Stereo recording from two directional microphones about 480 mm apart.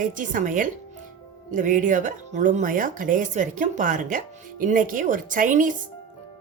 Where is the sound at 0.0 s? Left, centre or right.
Centre.